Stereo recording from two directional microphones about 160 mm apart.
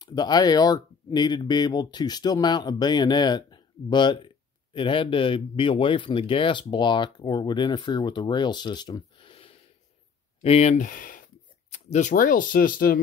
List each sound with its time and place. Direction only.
0.0 s speech: 25° left (ahead or behind); by 11.2 s 60° left (ahead or behind)
11.7 s speech: 50° left (ahead or behind); by 13.0 s 65° left (ahead or behind)